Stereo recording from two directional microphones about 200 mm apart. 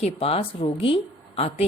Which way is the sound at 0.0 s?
30° left (ahead or behind).